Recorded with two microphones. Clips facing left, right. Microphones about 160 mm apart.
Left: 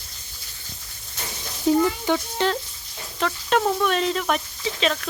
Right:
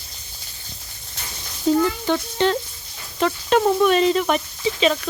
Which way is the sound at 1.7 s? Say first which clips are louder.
Right 1 dB; 10° left (ahead or behind).